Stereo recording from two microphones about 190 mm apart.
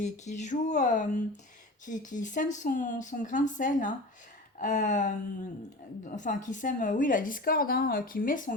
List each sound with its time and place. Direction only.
0.0 s a woman's voice: 40° left (ahead or behind)